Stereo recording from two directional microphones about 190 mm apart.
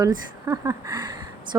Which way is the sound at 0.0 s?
20° right (ahead or behind).